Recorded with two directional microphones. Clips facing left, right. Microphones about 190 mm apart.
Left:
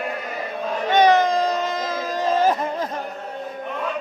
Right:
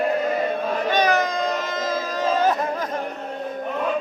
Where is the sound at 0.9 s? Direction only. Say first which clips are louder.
Left 6 dB; 25° left (ahead or behind).